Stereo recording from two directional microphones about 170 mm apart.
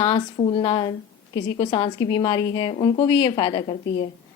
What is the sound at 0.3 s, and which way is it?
A woman's voice, 35° left (ahead or behind).